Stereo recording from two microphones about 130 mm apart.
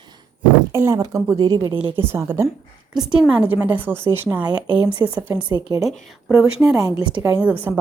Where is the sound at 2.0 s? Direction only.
20° right (ahead or behind).